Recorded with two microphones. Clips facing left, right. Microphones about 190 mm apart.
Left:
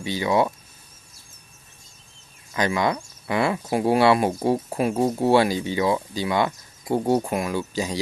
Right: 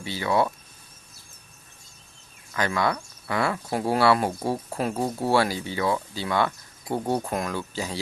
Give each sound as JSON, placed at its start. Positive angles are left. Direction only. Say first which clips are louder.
{"t": 0.0, "sound": "speech", "louder": "left 3 dB", "side_deg": 15}
{"t": 2.5, "sound": "speech", "louder": "left 3 dB", "side_deg": 20}